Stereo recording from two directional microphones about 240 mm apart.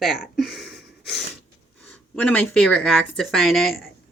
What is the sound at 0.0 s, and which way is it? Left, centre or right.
Speech, centre.